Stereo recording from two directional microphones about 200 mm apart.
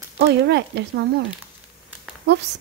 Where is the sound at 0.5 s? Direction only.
55° right (ahead or behind).